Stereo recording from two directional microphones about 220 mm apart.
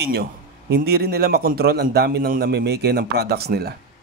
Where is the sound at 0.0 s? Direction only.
45° right (ahead or behind).